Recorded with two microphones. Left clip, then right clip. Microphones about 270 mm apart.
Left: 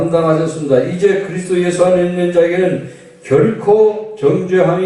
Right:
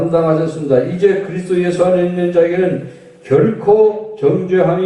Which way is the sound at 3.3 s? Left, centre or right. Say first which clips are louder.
Even; centre.